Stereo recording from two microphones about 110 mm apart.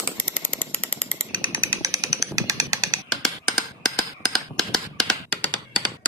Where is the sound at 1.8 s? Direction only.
30° right (ahead or behind).